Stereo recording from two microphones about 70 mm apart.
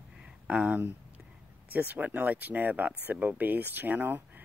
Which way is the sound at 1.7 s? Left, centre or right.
Right.